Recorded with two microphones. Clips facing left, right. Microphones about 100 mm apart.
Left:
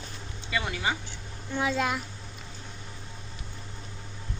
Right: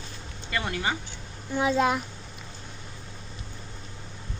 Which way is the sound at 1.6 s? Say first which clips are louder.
Right 4 dB; 20° right (ahead or behind).